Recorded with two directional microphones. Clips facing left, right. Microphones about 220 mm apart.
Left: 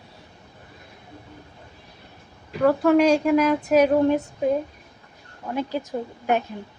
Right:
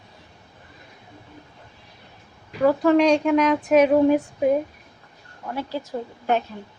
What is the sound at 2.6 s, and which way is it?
A woman's voice, centre (ahead or behind).